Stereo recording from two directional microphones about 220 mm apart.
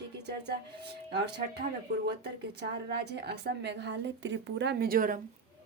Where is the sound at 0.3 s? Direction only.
50° right (ahead or behind).